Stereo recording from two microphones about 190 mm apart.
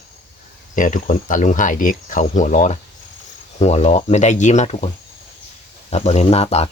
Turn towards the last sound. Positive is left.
turn(degrees=35)  # may be behind; listen again after turning